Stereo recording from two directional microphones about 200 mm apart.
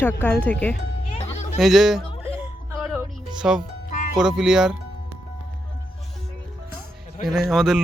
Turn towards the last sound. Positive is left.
turn(degrees=0)  # may be behind; listen again after turning